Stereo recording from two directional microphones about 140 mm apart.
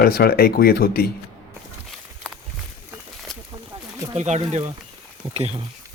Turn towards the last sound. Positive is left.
turn(degrees=-50)  # may be behind; listen again after turning